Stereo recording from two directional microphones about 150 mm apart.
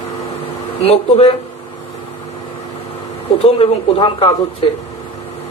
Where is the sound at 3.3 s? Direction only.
40° left (ahead or behind).